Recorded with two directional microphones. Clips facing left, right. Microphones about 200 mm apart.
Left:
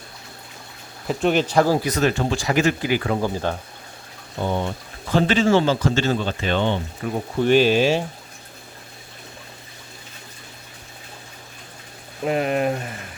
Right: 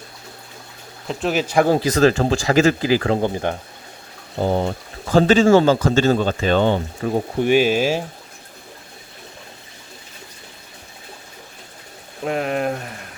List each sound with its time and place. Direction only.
1.0 s speech: centre (ahead or behind)
1.8 s speech: 90° right
3.1 s speech: 25° right (ahead or behind)
4.4 s speech: 35° right (ahead or behind)
7.3 s speech: 10° right (ahead or behind)
12.2 s speech: centre (ahead or behind)